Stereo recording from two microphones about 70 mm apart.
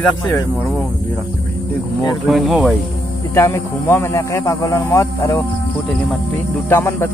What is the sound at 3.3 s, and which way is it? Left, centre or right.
A man's voice, left.